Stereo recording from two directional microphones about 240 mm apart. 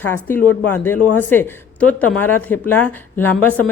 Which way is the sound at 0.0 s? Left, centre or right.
Centre.